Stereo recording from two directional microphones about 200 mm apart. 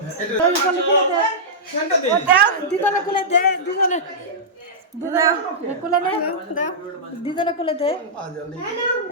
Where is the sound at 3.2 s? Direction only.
35° left (ahead or behind).